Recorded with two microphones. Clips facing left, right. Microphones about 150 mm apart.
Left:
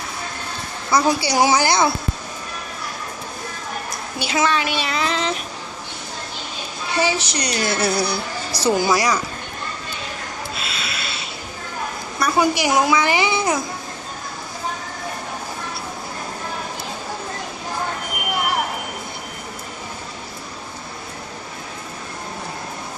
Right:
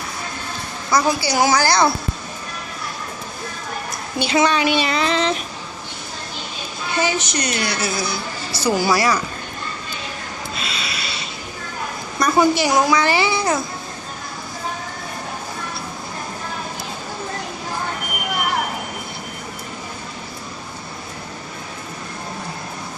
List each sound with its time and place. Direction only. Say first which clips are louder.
0.9 s a woman's voice: left 1 dB; 30° left (ahead or behind)
4.2 s speech: right 3 dB; 5° left (ahead or behind)
6.9 s a woman's voice: even; 30° left (ahead or behind)
7.6 s music: left 3 dB; 55° left (ahead or behind)
8.7 s a woman's voice: right 1 dB; 20° left (ahead or behind)
10.5 s a sound: right 1 dB; centre (ahead or behind)
12.2 s a woman's voice: right 2 dB; 15° left (ahead or behind)